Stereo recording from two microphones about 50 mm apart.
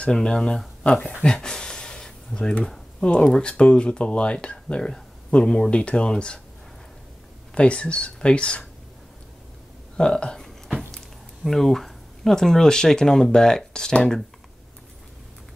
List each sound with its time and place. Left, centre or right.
0.1 s speech: centre
1.2 s a sound: centre
3.0 s speech: centre
7.5 s speech: left
9.9 s speech: centre